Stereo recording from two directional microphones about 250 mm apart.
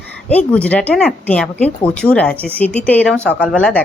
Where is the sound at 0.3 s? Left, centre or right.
Centre.